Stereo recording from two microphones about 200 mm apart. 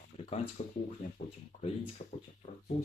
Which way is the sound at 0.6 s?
35° left (ahead or behind).